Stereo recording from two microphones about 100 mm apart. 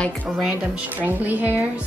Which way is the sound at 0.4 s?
10° right (ahead or behind).